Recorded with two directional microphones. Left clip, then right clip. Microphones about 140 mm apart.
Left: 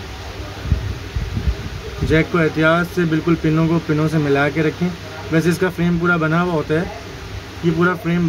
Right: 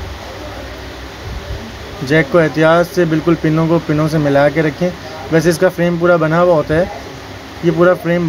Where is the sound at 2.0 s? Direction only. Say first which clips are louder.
Right 5 dB; 15° right (ahead or behind).